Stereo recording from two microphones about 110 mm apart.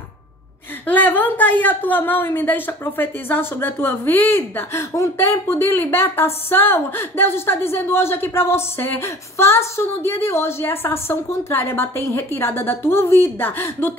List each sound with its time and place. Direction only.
0.8 s a woman's voice: 15° left (ahead or behind)